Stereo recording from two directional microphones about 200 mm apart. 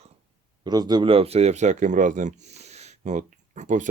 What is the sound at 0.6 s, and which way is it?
Speech, 20° right (ahead or behind).